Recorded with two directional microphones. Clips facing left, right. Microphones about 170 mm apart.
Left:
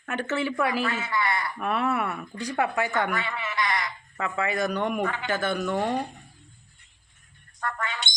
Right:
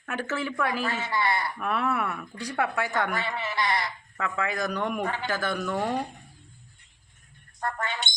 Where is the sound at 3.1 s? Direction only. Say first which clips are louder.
Even; 30° right (ahead or behind).